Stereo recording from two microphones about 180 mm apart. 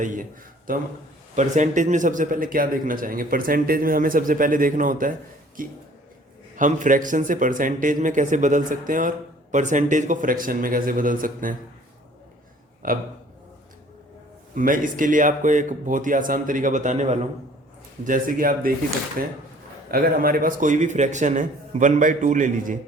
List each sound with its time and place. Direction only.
0.0 s a man's voice: 45° right (ahead or behind)
1.4 s a man's voice: 45° right (ahead or behind)
12.8 s a man's voice: 50° right (ahead or behind)
14.5 s a man's voice: 50° right (ahead or behind)